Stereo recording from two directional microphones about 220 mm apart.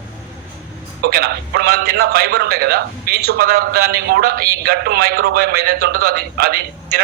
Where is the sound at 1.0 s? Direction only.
45° right (ahead or behind).